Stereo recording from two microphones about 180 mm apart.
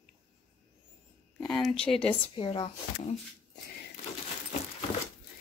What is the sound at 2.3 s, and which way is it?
Speech, 30° left (ahead or behind).